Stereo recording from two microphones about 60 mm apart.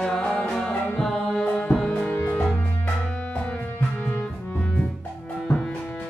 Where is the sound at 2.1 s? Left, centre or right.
Left.